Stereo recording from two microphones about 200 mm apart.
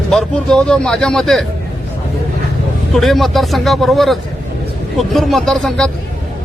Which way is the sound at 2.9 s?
Centre (ahead or behind).